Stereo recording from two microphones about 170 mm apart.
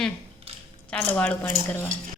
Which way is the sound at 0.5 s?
35° right (ahead or behind).